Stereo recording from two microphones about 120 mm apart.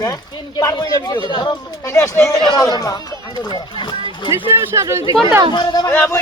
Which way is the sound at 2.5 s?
35° left (ahead or behind).